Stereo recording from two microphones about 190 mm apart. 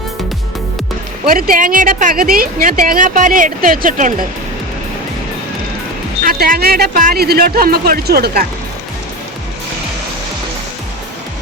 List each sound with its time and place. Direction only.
1.2 s speech: 50° right (ahead or behind)
6.2 s speech: 50° right (ahead or behind)